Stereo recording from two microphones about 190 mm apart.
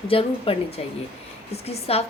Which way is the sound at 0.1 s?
30° left (ahead or behind).